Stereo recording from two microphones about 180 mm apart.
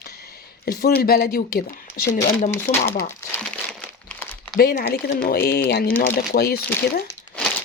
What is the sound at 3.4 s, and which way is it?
Crumpling, 5° left (ahead or behind).